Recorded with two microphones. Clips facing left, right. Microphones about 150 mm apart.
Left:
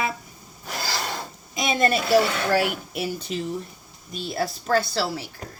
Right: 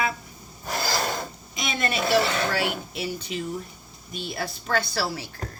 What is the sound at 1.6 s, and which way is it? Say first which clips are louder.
Speech: left 5 dB; 45° left (ahead or behind).